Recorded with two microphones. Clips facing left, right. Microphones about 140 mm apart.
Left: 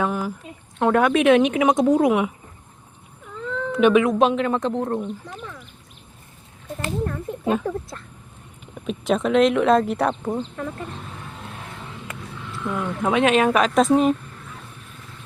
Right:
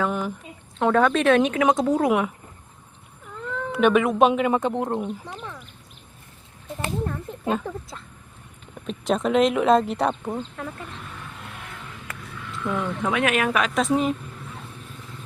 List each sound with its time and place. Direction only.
0.1 s a woman's voice: 5° left (ahead or behind)
2.0 s speech: centre (ahead or behind)
3.7 s speech: centre (ahead or behind); by 5.1 s 15° right (ahead or behind)
6.8 s speech: 5° right (ahead or behind)
12.0 s a sound: 20° left (ahead or behind)
12.6 s speech: 5° left (ahead or behind)
13.0 s speech: 25° left (ahead or behind); by 14.2 s 40° left (ahead or behind)